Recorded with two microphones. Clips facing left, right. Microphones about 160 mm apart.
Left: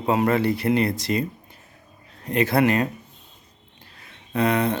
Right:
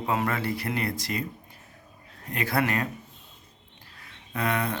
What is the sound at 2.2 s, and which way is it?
Speech, 25° left (ahead or behind).